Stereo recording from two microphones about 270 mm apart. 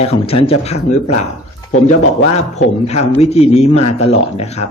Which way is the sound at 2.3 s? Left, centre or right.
Left.